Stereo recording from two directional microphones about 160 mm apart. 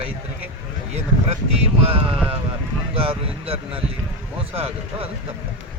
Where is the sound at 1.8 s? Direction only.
35° right (ahead or behind).